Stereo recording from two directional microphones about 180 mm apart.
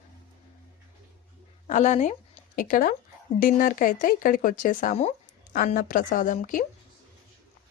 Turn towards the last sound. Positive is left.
turn(degrees=50)  # may be behind; listen again after turning